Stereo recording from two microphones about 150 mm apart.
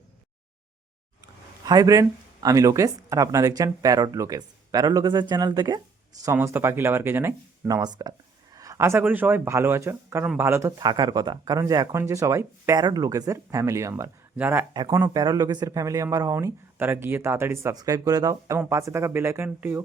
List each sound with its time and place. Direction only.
1.6 s speech: 25° right (ahead or behind)
6.2 s speech: 15° right (ahead or behind)
14.7 s speech: 25° right (ahead or behind)